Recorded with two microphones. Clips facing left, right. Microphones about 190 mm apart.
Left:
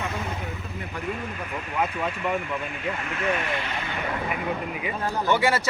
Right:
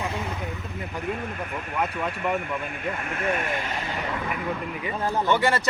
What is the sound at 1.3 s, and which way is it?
Speech, 50° right (ahead or behind).